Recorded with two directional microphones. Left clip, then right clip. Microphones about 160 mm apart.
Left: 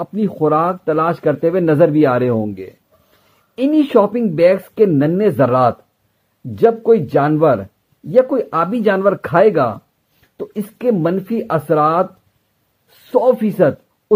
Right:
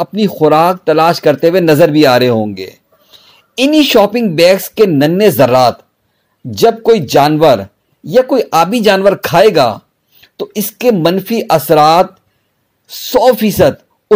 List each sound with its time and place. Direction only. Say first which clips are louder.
0.0 s speech: right 7 dB; 25° right (ahead or behind)
13.1 s speech: right 5 dB; 20° right (ahead or behind)